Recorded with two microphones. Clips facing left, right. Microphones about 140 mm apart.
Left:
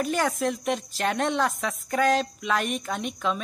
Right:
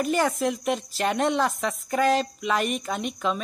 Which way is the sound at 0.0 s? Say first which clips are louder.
Right 2 dB; centre (ahead or behind).